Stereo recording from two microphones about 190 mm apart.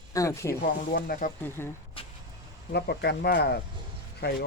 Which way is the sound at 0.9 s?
50° left (ahead or behind).